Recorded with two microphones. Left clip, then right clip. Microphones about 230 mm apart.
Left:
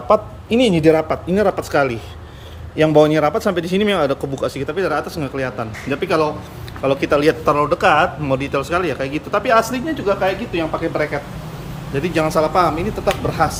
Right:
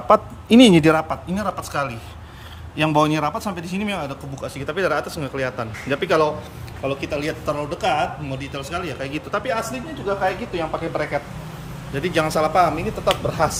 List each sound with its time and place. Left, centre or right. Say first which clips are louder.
0.1 s a man's voice: even; centre
1.1 s speech: left 8 dB; centre
6.8 s speech: left 9 dB; centre